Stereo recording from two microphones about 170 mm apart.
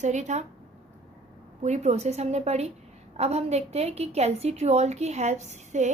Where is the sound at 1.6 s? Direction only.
45° right (ahead or behind).